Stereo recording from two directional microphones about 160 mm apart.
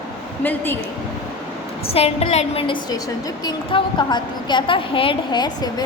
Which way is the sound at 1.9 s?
40° left (ahead or behind).